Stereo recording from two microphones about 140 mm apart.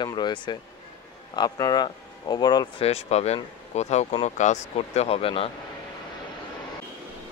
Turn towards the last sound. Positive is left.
turn(degrees=40)  # may be behind; listen again after turning